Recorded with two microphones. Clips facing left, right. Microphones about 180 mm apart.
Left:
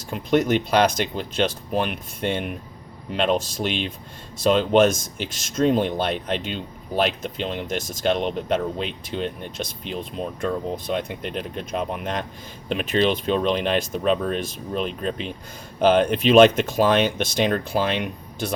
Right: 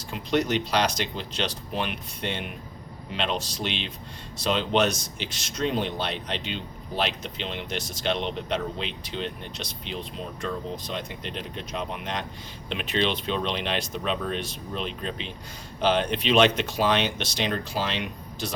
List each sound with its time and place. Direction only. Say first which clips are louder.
0.1 s speech: left 5 dB; 50° left (ahead or behind)